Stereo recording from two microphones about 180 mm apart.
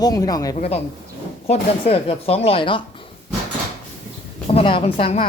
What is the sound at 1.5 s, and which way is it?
Speech, 35° left (ahead or behind).